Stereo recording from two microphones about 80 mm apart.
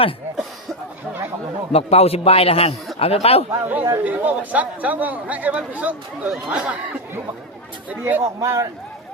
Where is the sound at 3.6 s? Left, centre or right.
Right.